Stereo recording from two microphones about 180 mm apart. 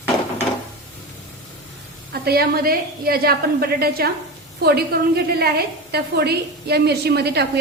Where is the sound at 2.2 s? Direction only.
60° right (ahead or behind).